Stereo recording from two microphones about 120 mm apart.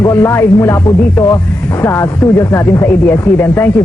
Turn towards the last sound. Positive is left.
turn(degrees=15)  # may be behind; listen again after turning